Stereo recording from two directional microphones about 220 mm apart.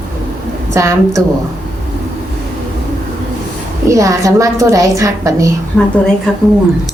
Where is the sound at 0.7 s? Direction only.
15° right (ahead or behind).